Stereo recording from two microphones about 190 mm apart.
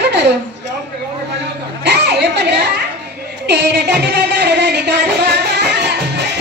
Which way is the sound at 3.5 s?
65° right (ahead or behind).